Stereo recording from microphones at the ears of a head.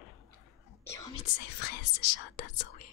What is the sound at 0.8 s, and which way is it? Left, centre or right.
Speech, left.